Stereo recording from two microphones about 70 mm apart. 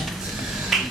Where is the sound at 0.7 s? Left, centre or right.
Centre.